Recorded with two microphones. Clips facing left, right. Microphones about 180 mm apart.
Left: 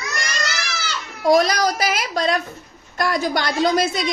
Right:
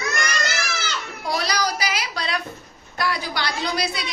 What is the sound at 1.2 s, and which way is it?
A woman's voice, 45° left (ahead or behind).